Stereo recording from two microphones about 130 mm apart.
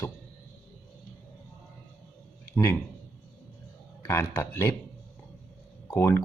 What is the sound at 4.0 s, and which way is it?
Speech, 20° left (ahead or behind).